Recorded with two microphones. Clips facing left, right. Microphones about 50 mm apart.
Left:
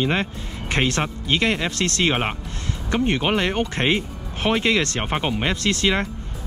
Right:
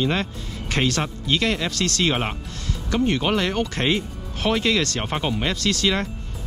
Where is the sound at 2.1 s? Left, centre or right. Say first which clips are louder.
Left 1 dB; centre.